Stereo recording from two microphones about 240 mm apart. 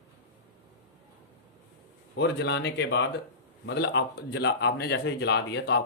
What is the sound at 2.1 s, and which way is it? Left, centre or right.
Speech, left.